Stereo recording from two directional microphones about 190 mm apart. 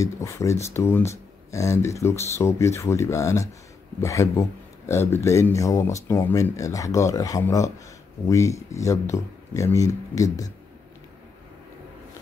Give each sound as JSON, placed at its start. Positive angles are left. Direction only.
{"t": 0.0, "sound": "speech", "side_deg": 15}